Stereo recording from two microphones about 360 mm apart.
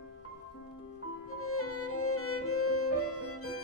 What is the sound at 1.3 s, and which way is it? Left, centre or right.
Music, left.